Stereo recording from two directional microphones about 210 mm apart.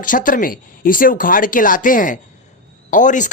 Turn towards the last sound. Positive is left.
turn(degrees=35)  # may be behind; listen again after turning